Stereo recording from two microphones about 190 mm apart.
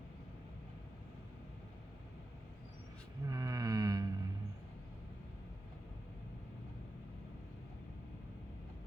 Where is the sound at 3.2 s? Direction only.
15° right (ahead or behind).